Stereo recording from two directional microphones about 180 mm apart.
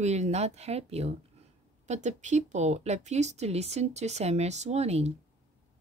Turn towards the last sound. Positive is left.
turn(degrees=-35)  # may be behind; listen again after turning